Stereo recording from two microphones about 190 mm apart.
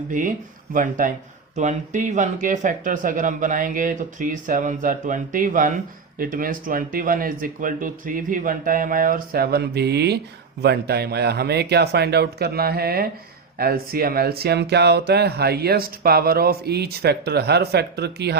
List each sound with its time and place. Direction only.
0.1 s speech: 45° right (ahead or behind); by 18.3 s 60° right (ahead or behind)